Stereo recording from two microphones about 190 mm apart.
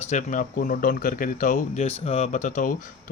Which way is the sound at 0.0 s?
40° left (ahead or behind).